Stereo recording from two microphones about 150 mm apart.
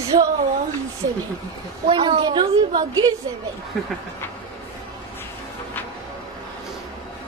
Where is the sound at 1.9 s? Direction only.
35° right (ahead or behind).